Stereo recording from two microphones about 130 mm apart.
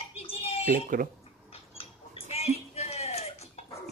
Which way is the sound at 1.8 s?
50° left (ahead or behind).